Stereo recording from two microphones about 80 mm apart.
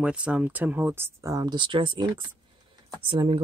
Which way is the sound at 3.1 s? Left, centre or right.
Right.